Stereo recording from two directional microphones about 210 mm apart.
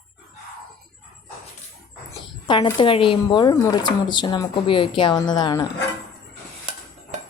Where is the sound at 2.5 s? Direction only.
20° left (ahead or behind).